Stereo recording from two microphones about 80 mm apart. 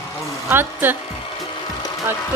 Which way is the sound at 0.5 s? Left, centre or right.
Right.